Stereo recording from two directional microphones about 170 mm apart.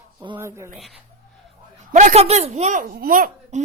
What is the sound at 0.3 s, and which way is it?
Speech, 15° right (ahead or behind).